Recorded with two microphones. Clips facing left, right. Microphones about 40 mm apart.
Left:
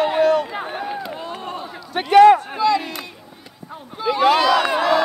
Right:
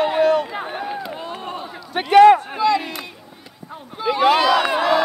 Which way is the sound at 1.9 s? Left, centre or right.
Centre.